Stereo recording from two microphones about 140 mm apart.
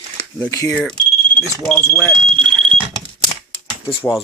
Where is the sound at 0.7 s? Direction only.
5° left (ahead or behind).